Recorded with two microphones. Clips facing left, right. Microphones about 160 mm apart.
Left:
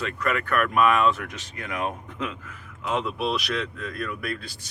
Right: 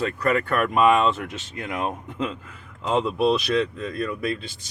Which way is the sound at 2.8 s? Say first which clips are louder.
Right 6 dB; 25° right (ahead or behind).